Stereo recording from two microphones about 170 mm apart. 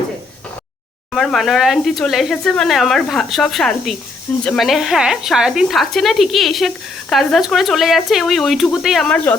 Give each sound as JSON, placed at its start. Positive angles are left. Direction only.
{"t": 1.1, "sound": "speech", "side_deg": 0}